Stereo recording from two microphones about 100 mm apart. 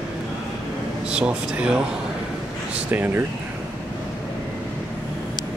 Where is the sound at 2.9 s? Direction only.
20° right (ahead or behind).